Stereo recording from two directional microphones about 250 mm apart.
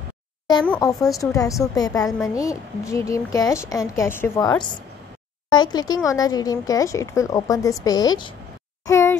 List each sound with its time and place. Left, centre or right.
0.7 s speech: centre
1.3 s a child's voice: centre